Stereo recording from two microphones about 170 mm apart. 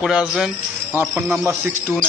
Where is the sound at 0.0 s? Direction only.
5° right (ahead or behind).